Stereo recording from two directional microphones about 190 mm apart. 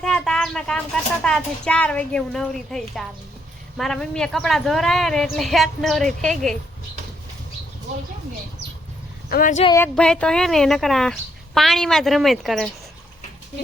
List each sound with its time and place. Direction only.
0.0 s a sound: 5° left (ahead or behind)
1.2 s speech: 5° left (ahead or behind)
9.3 s speech: 45° left (ahead or behind)
9.7 s speech: 10° left (ahead or behind)